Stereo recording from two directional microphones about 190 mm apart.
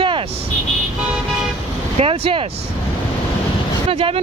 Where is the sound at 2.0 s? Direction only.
30° right (ahead or behind).